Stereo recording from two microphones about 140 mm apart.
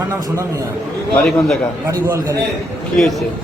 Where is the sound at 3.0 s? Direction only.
Centre (ahead or behind).